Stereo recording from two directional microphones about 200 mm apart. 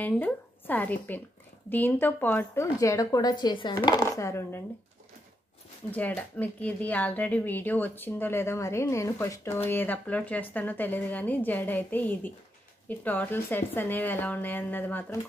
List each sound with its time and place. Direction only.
0.0 s speech: 10° left (ahead or behind)
5.9 s speech: 10° left (ahead or behind)